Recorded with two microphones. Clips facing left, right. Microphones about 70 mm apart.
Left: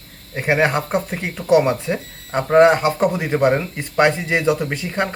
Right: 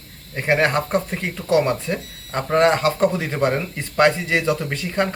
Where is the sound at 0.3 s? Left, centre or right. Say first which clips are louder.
Left 1 dB; centre.